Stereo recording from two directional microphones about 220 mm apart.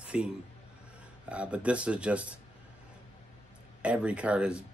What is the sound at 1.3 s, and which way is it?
Speech, 5° right (ahead or behind).